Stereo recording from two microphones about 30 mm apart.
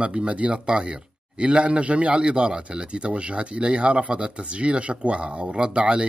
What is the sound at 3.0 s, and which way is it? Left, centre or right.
Speech, right.